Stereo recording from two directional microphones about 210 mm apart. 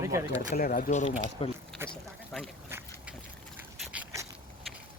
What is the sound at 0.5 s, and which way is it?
Speech, 45° left (ahead or behind).